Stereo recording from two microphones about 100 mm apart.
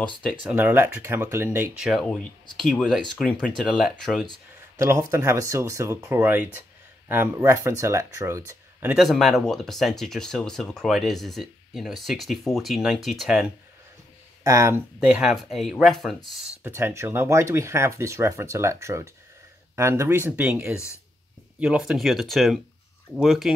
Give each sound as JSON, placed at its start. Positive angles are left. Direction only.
{"t": 0.4, "sound": "speech", "side_deg": -15}
{"t": 1.0, "sound": "speech", "side_deg": -25}
{"t": 1.8, "sound": "speech", "side_deg": -5}
{"t": 2.6, "sound": "speech", "side_deg": 10}
{"t": 4.0, "sound": "speech", "side_deg": 5}
{"t": 4.7, "sound": "speech", "side_deg": -25}
{"t": 8.8, "sound": "speech", "side_deg": -5}
{"t": 14.4, "sound": "speech", "side_deg": -30}
{"t": 15.0, "sound": "speech", "side_deg": -10}
{"t": 15.3, "sound": "speech", "side_deg": 0}
{"t": 16.6, "sound": "speech", "side_deg": -25}